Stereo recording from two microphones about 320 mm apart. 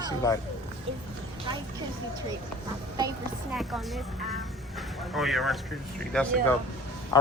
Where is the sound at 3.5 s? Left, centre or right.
Centre.